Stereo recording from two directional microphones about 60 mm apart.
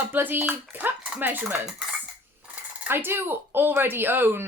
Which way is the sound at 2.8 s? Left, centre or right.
Right.